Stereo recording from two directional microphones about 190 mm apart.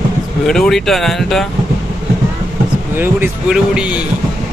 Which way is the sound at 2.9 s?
5° right (ahead or behind).